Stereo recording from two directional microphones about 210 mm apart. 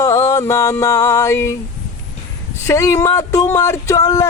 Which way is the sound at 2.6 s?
15° left (ahead or behind).